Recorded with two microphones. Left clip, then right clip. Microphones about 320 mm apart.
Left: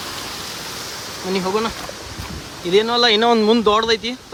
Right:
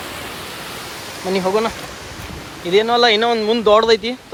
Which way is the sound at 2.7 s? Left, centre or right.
Centre.